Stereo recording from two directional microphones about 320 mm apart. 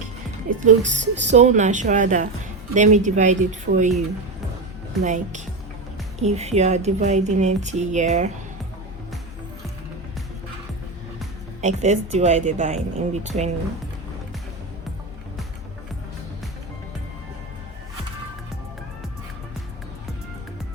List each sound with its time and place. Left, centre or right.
0.6 s a woman's voice: right
5.0 s a woman's voice: right
11.6 s a woman's voice: right